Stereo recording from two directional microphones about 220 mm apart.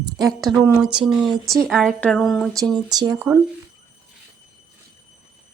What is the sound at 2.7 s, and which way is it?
Speech, 20° right (ahead or behind).